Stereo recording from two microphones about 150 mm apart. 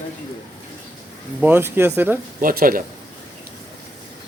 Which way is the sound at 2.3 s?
65° right (ahead or behind).